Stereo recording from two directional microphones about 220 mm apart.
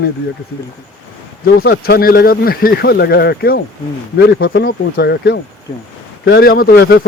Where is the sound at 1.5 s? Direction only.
45° left (ahead or behind).